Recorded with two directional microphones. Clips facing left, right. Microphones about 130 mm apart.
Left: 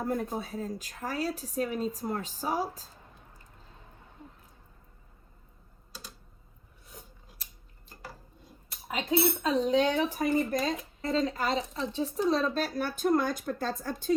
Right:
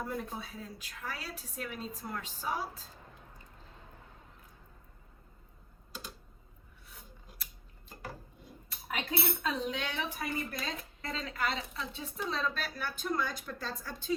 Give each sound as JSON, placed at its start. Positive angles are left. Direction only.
{"t": 0.0, "sound": "a woman's voice", "side_deg": 45}
{"t": 9.4, "sound": "a woman's voice", "side_deg": 35}